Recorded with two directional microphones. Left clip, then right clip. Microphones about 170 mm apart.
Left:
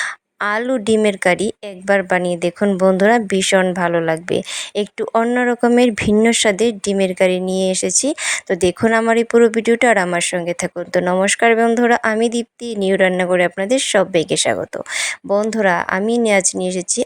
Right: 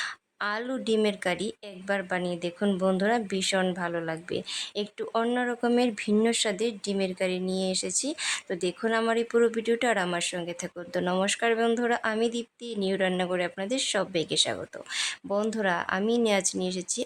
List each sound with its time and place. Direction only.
0.0 s speech: 40° left (ahead or behind)